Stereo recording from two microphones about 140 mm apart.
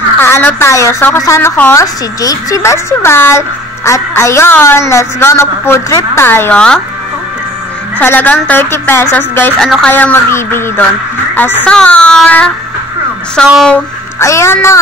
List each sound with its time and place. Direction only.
0.2 s a woman's voice: 15° left (ahead or behind)
8.0 s a woman's voice: 15° left (ahead or behind)
9.9 s a woman's voice: 15° left (ahead or behind)
13.5 s speech: centre (ahead or behind)
14.2 s a woman's voice: 20° left (ahead or behind)